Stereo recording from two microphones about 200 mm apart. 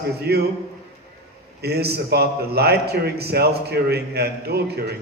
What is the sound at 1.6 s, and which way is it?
A man's voice, 55° right (ahead or behind).